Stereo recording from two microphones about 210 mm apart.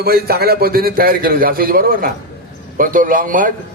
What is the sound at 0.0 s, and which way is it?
A man's voice, 45° right (ahead or behind).